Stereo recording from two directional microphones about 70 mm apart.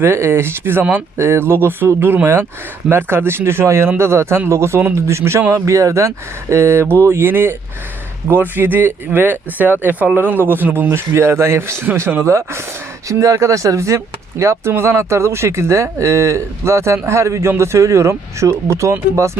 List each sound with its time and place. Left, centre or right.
0.0 s speech: right
11.1 s speech: right